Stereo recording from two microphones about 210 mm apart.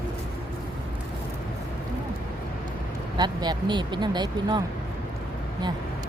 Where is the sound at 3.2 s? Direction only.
20° right (ahead or behind).